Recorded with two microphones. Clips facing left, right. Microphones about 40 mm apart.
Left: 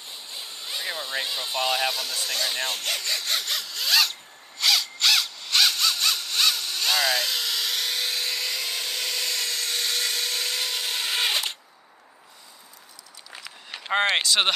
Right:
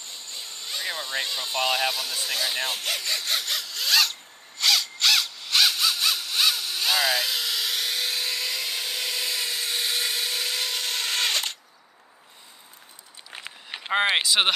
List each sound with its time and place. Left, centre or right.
0.0 s a sound: centre
13.3 s run: right
13.7 s speech: centre